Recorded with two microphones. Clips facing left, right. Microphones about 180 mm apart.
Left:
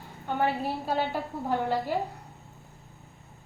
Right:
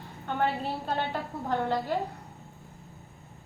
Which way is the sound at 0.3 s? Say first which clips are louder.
Left 1 dB; 10° left (ahead or behind).